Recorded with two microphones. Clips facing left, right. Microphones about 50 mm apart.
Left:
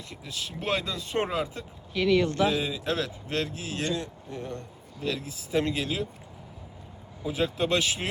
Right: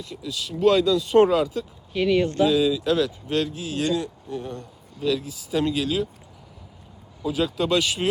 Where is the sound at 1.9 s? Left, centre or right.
Centre.